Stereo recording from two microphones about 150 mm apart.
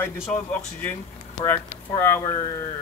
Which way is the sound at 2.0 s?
15° left (ahead or behind).